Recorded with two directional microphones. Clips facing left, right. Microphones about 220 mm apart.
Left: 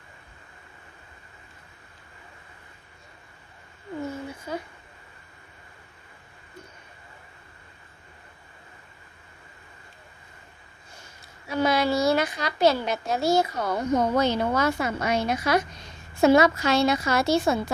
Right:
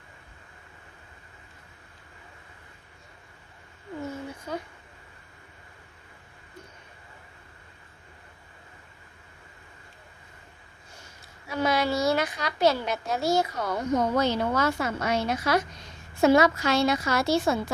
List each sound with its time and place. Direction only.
4.5 s speech: 5° left (ahead or behind)
11.4 s a woman's voice: 30° left (ahead or behind)